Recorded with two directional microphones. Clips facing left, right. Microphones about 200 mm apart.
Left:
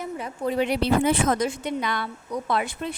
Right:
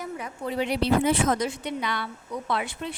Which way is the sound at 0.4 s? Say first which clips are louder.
Left 2 dB; 50° left (ahead or behind).